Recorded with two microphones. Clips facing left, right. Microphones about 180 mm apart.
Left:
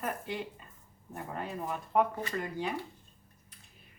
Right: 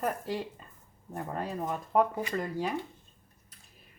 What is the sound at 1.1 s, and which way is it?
Speech, 40° right (ahead or behind).